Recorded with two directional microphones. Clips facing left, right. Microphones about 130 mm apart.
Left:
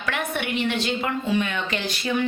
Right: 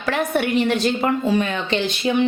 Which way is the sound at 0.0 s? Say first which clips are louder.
Right 7 dB; 35° right (ahead or behind).